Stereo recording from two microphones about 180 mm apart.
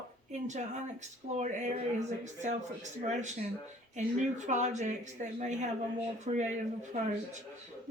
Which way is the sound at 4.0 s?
40° right (ahead or behind).